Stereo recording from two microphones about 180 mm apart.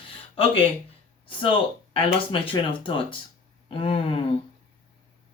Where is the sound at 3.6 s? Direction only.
30° left (ahead or behind).